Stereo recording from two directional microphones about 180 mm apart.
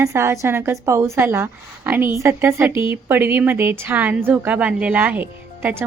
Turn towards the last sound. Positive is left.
turn(degrees=-10)  # may be behind; listen again after turning